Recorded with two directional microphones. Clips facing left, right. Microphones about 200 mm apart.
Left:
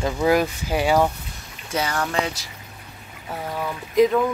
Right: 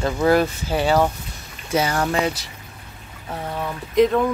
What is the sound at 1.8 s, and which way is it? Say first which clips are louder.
Speech: right 4 dB; 25° right (ahead or behind).